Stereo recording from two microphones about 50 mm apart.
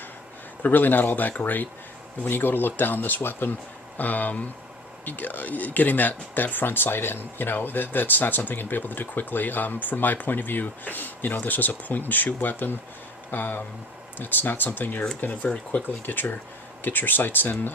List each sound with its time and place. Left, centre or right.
0.6 s speech: left
2.2 s speech: left
16.0 s speech: left